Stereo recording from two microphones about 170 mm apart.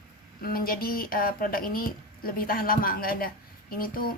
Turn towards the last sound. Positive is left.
turn(degrees=60)  # may be behind; listen again after turning